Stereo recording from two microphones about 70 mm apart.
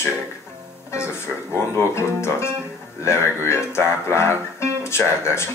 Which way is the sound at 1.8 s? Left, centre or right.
Left.